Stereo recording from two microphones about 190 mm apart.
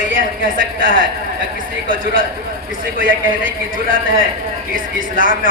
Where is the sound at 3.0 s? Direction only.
45° right (ahead or behind).